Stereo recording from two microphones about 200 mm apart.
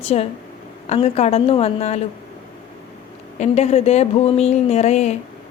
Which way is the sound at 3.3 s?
35° left (ahead or behind).